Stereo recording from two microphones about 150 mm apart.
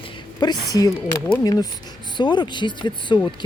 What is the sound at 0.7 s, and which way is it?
Speech, 25° left (ahead or behind).